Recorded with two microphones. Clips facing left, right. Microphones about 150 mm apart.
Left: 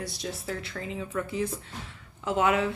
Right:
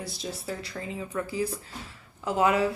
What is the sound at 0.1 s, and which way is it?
Speech, centre (ahead or behind).